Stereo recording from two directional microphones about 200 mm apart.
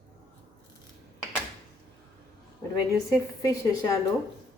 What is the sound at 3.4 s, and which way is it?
Speech, 20° left (ahead or behind).